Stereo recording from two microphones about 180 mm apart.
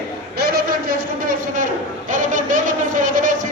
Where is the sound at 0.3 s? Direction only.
55° right (ahead or behind).